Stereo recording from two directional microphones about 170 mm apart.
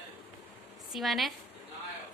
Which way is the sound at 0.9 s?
Centre (ahead or behind).